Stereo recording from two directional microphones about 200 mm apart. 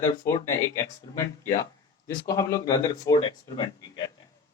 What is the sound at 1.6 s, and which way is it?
Speech, 15° left (ahead or behind).